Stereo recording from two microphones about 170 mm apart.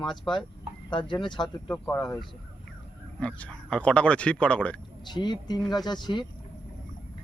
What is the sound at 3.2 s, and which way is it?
A man's voice, 5° left (ahead or behind).